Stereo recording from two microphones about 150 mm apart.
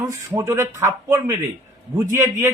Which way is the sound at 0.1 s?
20° right (ahead or behind).